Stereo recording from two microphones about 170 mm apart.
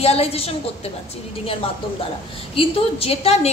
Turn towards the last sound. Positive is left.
turn(degrees=35)  # may be behind; listen again after turning